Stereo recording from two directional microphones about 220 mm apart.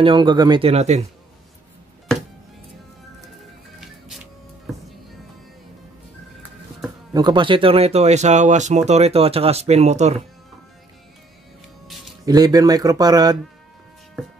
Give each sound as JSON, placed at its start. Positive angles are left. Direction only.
{"t": 0.0, "sound": "speech", "side_deg": -20}
{"t": 3.8, "sound": "printer", "side_deg": 0}
{"t": 7.2, "sound": "speech", "side_deg": -20}
{"t": 12.3, "sound": "speech", "side_deg": -15}